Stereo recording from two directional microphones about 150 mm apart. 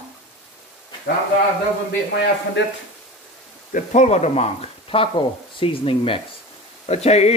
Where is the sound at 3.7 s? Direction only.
60° left (ahead or behind).